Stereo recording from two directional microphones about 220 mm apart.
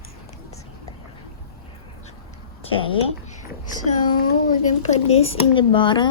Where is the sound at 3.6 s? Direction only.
35° left (ahead or behind).